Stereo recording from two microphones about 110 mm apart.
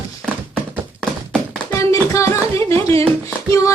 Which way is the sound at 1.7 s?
25° left (ahead or behind).